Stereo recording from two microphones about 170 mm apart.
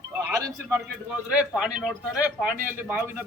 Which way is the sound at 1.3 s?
5° right (ahead or behind).